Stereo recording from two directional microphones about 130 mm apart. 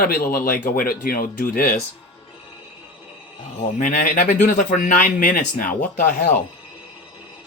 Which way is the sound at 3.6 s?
75° left (ahead or behind).